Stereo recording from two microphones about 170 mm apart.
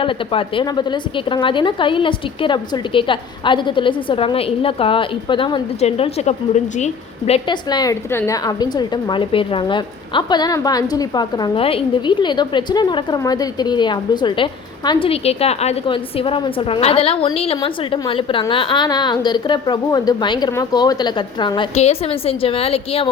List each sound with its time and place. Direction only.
0.0 s a woman's voice: 30° left (ahead or behind)
5.8 s a woman's voice: 40° left (ahead or behind)